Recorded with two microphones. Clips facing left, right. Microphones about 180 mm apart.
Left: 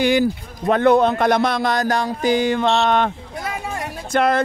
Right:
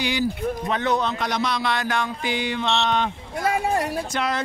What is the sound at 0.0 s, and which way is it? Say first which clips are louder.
Music: left 6 dB; 50° left (ahead or behind).